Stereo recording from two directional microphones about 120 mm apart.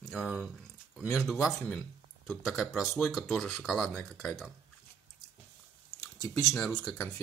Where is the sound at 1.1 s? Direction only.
Centre (ahead or behind).